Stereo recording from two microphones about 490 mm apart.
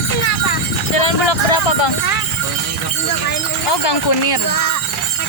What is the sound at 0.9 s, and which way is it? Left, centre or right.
Speech, left.